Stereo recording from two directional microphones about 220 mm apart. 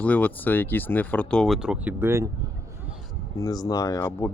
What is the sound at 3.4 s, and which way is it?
Speech, 15° left (ahead or behind).